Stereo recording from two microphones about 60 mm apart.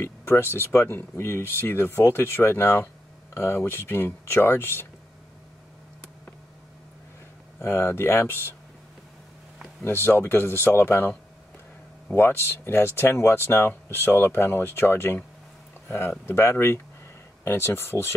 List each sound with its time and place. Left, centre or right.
0.0 s speech: left
7.6 s speech: left
9.8 s speech: left